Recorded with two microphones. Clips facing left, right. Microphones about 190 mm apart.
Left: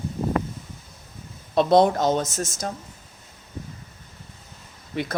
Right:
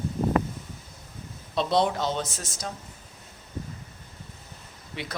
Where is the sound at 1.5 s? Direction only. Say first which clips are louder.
Left 7 dB; 50° left (ahead or behind).